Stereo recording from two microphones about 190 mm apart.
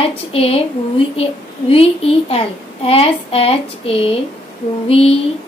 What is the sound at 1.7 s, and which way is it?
Speech, 30° left (ahead or behind).